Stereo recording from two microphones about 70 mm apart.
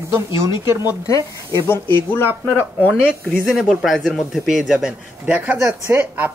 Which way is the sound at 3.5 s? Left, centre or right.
Centre.